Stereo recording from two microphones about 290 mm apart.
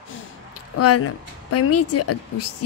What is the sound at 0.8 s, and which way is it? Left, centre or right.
A woman's voice, left.